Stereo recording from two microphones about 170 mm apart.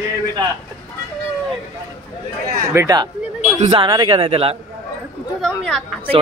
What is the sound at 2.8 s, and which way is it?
A man's voice, 20° right (ahead or behind).